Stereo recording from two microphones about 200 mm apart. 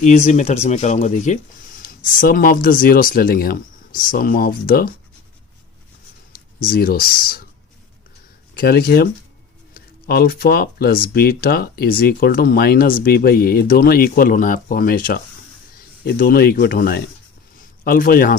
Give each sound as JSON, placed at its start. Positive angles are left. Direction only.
{"t": 0.0, "sound": "speech", "side_deg": 35}
{"t": 6.6, "sound": "speech", "side_deg": 45}
{"t": 8.5, "sound": "speech", "side_deg": 50}